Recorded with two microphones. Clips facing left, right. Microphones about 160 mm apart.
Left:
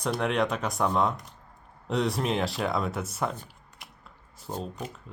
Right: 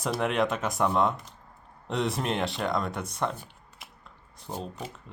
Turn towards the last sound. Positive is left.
turn(degrees=0)  # may be behind; listen again after turning